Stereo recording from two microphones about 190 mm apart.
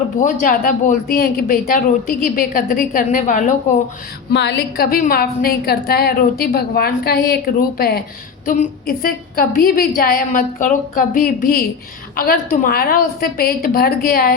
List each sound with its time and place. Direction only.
0.2 s speech: 45° left (ahead or behind)
4.3 s a woman's voice: 65° left (ahead or behind)